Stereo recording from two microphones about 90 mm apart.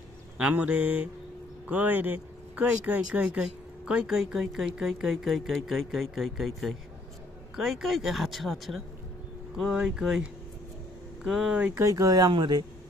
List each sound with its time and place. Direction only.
0.4 s speech: 15° right (ahead or behind)
11.2 s speech: 5° right (ahead or behind)
11.7 s speech: 40° right (ahead or behind)
12.3 s speech: 55° right (ahead or behind)